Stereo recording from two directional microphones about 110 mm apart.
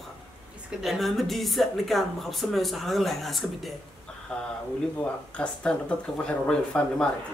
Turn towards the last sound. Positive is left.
turn(degrees=10)  # may be behind; listen again after turning